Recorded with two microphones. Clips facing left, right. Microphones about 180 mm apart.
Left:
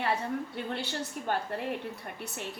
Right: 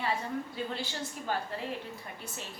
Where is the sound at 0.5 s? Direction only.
65° left (ahead or behind).